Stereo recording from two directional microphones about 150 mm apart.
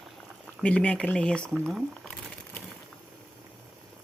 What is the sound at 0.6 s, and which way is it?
Speech, 5° left (ahead or behind).